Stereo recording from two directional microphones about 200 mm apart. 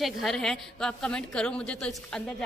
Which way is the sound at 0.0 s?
Centre (ahead or behind).